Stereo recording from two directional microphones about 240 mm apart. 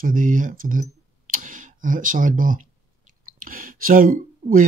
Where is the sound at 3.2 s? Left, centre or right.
Right.